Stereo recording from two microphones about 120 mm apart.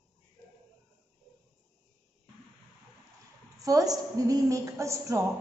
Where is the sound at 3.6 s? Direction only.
30° right (ahead or behind).